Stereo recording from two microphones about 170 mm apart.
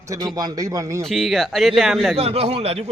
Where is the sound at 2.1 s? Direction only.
35° right (ahead or behind).